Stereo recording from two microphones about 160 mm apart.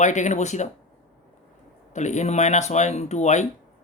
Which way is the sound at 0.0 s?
50° left (ahead or behind).